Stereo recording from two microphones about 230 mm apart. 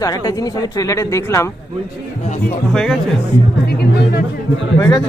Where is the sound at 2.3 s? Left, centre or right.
Left.